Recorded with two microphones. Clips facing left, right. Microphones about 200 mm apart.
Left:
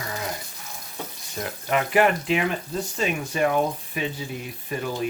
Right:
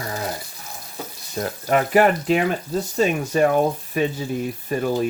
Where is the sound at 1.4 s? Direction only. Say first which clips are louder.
Right 5 dB; 40° right (ahead or behind).